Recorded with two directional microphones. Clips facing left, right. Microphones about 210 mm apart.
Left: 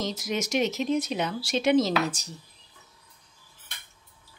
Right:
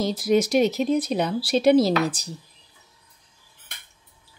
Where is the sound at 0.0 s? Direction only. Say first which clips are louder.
Right 9 dB; 35° right (ahead or behind).